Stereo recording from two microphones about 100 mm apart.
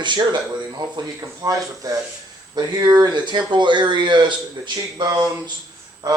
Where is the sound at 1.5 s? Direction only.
40° right (ahead or behind).